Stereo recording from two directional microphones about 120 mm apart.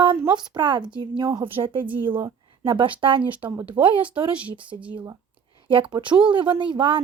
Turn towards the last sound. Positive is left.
turn(degrees=-40)  # may be behind; listen again after turning